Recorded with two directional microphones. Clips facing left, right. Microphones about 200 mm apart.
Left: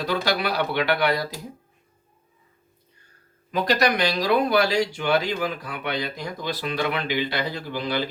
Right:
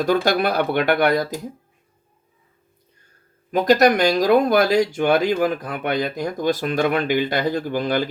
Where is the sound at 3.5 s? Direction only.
45° right (ahead or behind).